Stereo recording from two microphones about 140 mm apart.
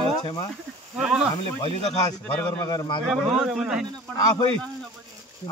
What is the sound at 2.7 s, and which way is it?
Speech, 30° left (ahead or behind).